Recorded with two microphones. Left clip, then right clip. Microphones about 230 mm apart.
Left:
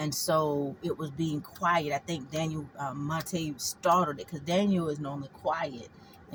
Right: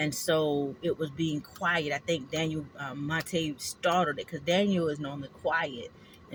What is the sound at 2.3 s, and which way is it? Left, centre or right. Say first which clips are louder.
Speech: right 2 dB; left.